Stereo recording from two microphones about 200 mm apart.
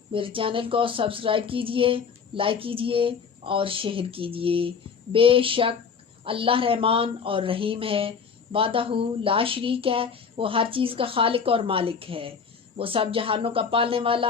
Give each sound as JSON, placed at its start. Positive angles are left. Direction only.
{"t": 0.1, "sound": "speech", "side_deg": -25}